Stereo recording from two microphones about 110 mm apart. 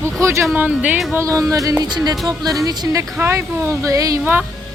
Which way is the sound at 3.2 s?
25° right (ahead or behind).